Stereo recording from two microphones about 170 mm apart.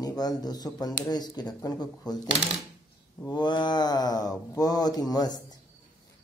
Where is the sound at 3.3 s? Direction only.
25° left (ahead or behind).